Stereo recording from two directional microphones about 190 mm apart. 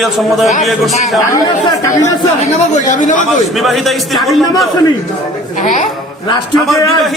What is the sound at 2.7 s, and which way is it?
Speech, 40° left (ahead or behind).